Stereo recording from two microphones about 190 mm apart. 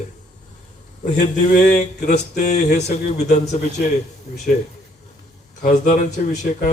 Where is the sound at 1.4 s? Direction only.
40° left (ahead or behind).